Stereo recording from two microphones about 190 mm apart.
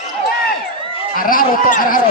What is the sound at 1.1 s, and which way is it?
Speech, 45° left (ahead or behind).